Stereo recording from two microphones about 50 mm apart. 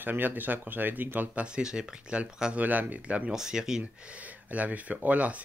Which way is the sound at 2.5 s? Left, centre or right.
Right.